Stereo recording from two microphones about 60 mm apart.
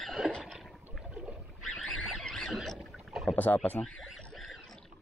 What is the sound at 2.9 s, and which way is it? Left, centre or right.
Rowboat, centre.